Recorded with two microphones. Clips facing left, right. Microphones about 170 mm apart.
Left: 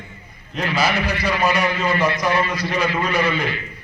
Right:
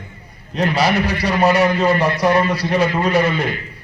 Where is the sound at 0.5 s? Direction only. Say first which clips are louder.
Right 4 dB; 35° right (ahead or behind).